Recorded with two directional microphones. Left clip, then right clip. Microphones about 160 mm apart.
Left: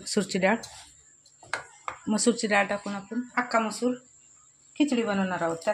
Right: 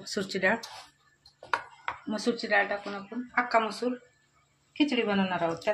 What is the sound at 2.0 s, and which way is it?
Speech, 60° left (ahead or behind).